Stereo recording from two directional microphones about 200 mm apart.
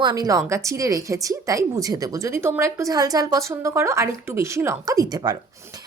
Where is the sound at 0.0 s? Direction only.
20° right (ahead or behind).